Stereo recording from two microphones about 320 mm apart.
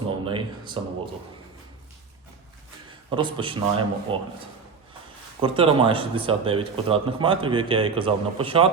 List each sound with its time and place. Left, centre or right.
0.1 s speech: centre
3.1 s speech: centre
5.4 s speech: centre